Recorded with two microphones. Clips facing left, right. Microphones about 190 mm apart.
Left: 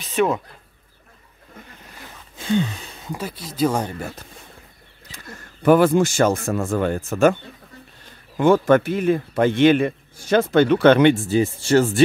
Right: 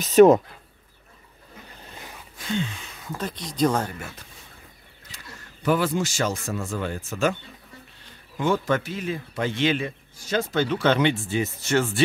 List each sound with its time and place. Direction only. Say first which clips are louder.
0.0 s speech: right 7 dB; 40° right (ahead or behind)
2.3 s a sound: left 7 dB; 30° left (ahead or behind)
3.1 s speech: left 1 dB; 10° left (ahead or behind)
5.1 s speech: left 5 dB; 55° left (ahead or behind)
8.4 s speech: left 8 dB; 55° left (ahead or behind)
11.2 s speech: left 7 dB; 35° left (ahead or behind)